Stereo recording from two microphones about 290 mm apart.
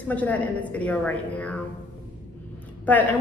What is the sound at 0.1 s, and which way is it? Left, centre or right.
A woman's voice, centre.